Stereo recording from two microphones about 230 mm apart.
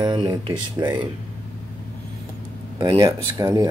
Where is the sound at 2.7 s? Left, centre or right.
Centre.